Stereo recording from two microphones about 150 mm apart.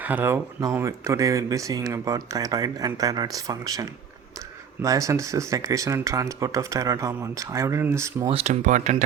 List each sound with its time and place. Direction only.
0.0 s speech: 10° right (ahead or behind)
8.3 s speech: 50° right (ahead or behind)